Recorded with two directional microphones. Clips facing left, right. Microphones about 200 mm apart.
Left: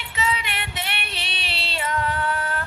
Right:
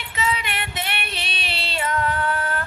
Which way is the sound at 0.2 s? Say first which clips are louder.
Right 1 dB; 50° right (ahead or behind).